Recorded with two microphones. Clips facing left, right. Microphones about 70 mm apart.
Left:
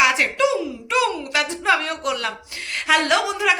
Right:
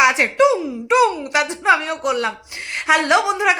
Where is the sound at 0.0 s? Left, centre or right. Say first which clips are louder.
Right 4 dB; right.